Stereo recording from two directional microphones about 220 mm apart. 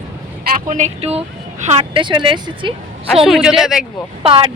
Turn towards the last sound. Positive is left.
turn(degrees=-25)  # may be behind; listen again after turning